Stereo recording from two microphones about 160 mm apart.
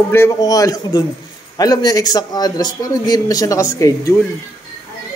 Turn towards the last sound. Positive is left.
turn(degrees=20)  # may be behind; listen again after turning